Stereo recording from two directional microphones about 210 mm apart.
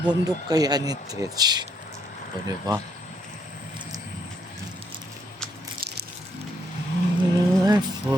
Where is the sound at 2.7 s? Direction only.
20° right (ahead or behind).